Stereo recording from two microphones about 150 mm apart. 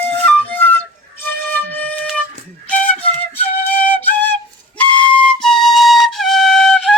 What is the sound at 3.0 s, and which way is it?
Flute, 10° left (ahead or behind).